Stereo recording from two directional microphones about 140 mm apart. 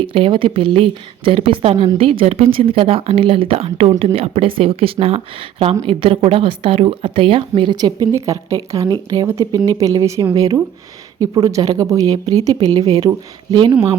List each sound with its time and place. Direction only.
0.0 s a woman's voice: 40° right (ahead or behind)